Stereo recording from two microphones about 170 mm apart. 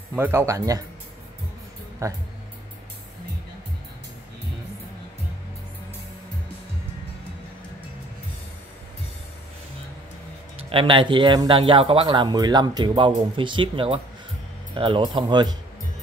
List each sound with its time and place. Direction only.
0.1 s speech: 10° right (ahead or behind)
2.0 s speech: 20° right (ahead or behind)
10.7 s speech: 30° right (ahead or behind)